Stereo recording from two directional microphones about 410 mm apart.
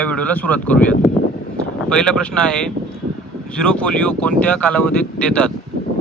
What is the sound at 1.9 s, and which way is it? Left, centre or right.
Speech, centre.